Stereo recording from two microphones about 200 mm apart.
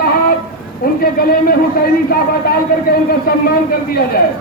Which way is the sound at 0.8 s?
50° left (ahead or behind).